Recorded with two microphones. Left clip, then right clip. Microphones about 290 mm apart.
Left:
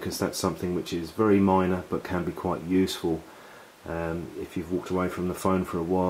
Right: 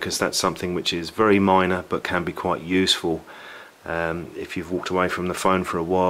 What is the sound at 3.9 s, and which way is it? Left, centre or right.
Speech, centre.